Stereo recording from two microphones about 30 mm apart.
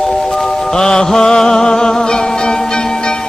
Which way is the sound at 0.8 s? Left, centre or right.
Left.